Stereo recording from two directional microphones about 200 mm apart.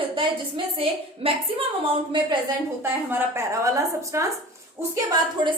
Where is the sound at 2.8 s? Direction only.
10° right (ahead or behind).